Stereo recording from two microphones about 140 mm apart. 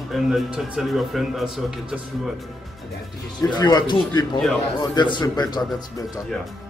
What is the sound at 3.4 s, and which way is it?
Speech, 30° left (ahead or behind).